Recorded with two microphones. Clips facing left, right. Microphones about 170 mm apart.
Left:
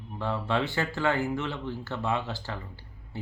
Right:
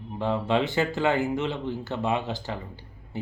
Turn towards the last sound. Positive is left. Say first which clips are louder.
# right 3 dB
turn(degrees=-15)  # may be behind; listen again after turning